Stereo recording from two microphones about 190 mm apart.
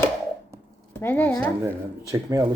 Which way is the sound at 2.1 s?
15° right (ahead or behind).